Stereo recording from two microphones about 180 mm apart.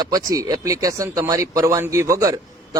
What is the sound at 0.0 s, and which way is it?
A man's voice, 20° right (ahead or behind).